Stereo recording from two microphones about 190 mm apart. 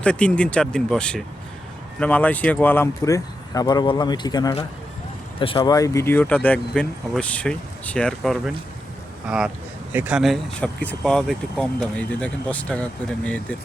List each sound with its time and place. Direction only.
0.0 s speech: 5° left (ahead or behind)
9.9 s speech: 10° right (ahead or behind)